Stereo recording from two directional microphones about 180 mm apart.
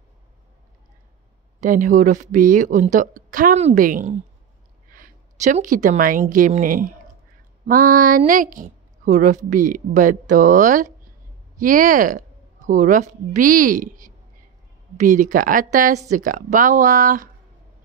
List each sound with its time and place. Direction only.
1.6 s a woman's voice: 45° right (ahead or behind)